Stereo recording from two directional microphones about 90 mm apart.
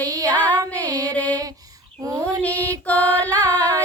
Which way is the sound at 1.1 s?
15° left (ahead or behind).